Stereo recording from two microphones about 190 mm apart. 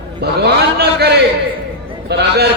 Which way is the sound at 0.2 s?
60° right (ahead or behind).